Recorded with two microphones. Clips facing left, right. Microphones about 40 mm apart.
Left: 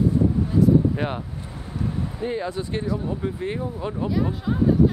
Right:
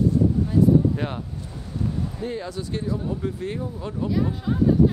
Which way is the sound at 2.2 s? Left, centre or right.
Centre.